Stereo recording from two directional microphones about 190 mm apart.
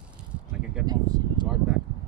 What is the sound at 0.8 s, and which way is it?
Speech, 20° right (ahead or behind).